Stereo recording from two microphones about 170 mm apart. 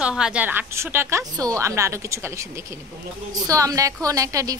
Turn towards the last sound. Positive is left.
turn(degrees=-20)  # may be behind; listen again after turning